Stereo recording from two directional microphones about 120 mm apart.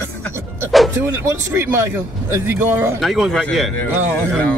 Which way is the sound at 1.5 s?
20° right (ahead or behind).